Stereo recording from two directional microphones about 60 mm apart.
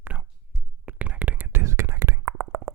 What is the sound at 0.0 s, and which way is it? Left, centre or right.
Whispering, right.